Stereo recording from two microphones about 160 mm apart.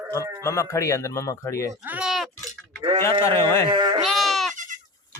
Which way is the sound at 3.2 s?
15° left (ahead or behind).